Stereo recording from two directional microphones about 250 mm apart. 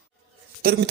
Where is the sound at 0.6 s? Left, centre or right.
Right.